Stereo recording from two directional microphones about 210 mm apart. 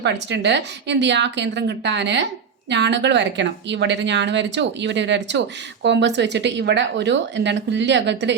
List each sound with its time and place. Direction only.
0.0 s speech: 55° right (ahead or behind)